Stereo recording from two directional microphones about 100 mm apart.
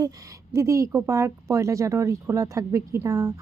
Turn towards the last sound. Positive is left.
turn(degrees=-35)  # may be behind; listen again after turning